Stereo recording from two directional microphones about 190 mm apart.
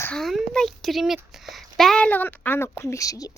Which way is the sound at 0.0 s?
5° left (ahead or behind).